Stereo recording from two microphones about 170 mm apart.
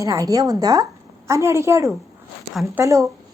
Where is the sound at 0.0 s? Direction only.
20° right (ahead or behind).